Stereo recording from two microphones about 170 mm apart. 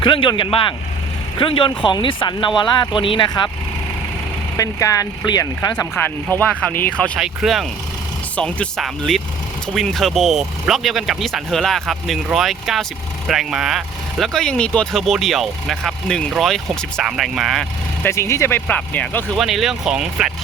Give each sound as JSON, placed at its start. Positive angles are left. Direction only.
{"t": 0.0, "sound": "speech", "side_deg": 30}
{"t": 4.5, "sound": "speech", "side_deg": 20}
{"t": 6.0, "sound": "speech", "side_deg": 10}
{"t": 7.2, "sound": "speech", "side_deg": 0}
{"t": 18.0, "sound": "speech", "side_deg": 15}